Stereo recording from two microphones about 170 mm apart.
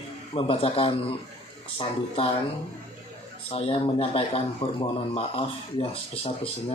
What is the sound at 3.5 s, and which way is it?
Speech, 35° left (ahead or behind).